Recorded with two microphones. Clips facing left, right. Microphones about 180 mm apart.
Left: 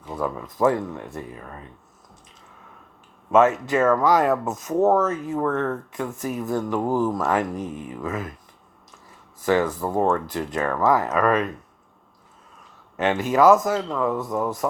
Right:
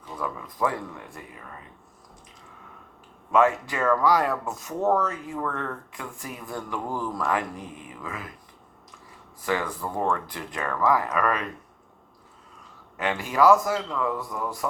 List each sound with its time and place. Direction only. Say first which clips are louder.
0.2 s speech: left 6 dB; 25° left (ahead or behind)
3.3 s speech: left 4 dB; 25° left (ahead or behind)
7.5 s speech: left 8 dB; 45° left (ahead or behind)
9.5 s speech: left 7 dB; 25° left (ahead or behind)
13.0 s speech: left 4 dB; 25° left (ahead or behind)